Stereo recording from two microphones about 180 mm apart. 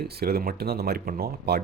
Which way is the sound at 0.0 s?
60° right (ahead or behind).